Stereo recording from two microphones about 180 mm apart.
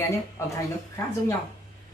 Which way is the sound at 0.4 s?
15° left (ahead or behind).